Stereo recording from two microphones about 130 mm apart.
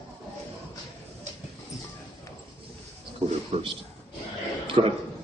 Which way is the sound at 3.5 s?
55° right (ahead or behind).